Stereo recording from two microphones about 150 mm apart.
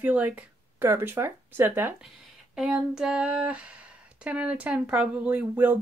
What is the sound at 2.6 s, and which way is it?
Speech, 5° right (ahead or behind).